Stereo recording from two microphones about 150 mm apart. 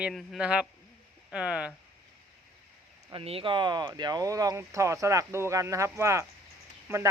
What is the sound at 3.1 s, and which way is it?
Speech, 35° right (ahead or behind).